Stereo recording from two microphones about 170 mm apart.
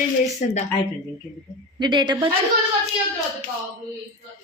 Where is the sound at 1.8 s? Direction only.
25° right (ahead or behind).